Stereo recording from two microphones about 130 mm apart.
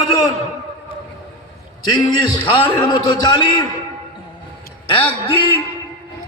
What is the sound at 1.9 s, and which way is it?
Speech, 35° left (ahead or behind).